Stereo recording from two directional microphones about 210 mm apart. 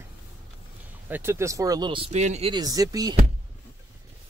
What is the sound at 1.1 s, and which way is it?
Speech, 10° right (ahead or behind).